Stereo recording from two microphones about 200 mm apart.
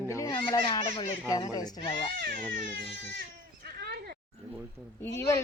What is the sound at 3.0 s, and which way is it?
Goat, 55° right (ahead or behind).